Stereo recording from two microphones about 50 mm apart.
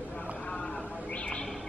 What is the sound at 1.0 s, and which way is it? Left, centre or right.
Bird, left.